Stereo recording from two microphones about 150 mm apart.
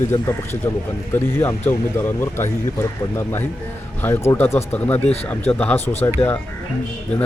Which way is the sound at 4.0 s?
15° left (ahead or behind).